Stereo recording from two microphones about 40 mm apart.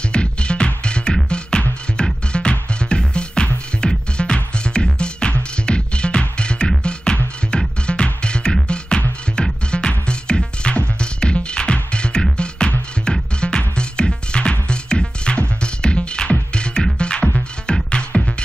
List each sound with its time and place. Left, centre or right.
0.1 s music: left